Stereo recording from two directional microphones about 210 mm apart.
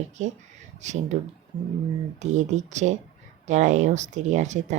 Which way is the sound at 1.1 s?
35° right (ahead or behind).